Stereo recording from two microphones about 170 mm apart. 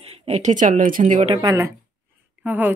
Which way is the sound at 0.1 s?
35° right (ahead or behind).